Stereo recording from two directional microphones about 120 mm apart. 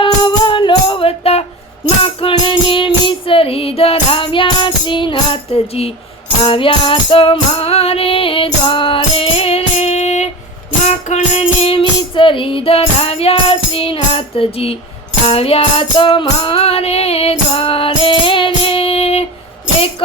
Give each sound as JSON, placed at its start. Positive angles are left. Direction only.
{"t": 0.0, "sound": "music", "side_deg": 40}
{"t": 6.4, "sound": "music", "side_deg": 45}